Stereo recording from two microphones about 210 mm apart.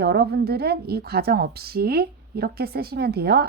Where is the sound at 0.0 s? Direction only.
50° right (ahead or behind).